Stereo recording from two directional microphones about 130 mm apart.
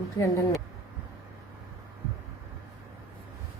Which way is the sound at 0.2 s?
25° left (ahead or behind).